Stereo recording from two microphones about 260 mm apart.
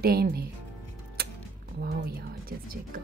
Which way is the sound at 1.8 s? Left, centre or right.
Right.